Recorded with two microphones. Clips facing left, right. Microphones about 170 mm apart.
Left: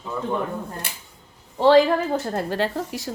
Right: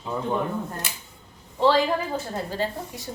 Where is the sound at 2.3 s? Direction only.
70° left (ahead or behind).